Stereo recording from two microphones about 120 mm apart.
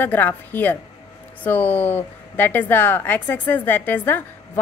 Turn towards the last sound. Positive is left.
turn(degrees=15)  # may be behind; listen again after turning